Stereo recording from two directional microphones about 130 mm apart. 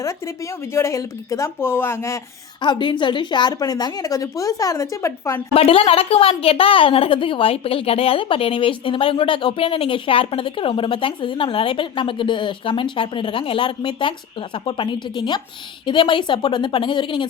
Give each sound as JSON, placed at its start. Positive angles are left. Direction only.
{"t": 0.7, "sound": "speech", "side_deg": 20}
{"t": 2.6, "sound": "a woman's voice", "side_deg": 35}
{"t": 5.5, "sound": "a woman's voice", "side_deg": 45}